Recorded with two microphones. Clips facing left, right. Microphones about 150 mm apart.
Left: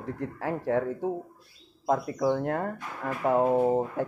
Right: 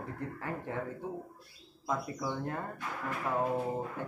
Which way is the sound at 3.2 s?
50° left (ahead or behind).